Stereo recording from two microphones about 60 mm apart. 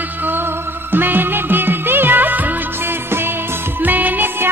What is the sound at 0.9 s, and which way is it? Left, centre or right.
Music, right.